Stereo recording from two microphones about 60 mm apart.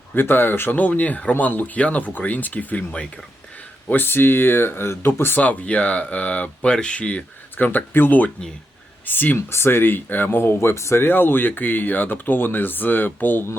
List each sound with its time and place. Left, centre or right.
0.1 s speech: left
3.8 s speech: left
5.4 s speech: left
7.5 s speech: left